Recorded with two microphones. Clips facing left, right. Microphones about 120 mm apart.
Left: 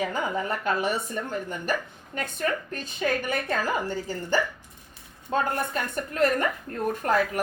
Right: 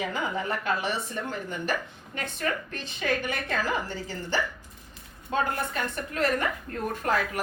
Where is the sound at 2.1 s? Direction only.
40° left (ahead or behind).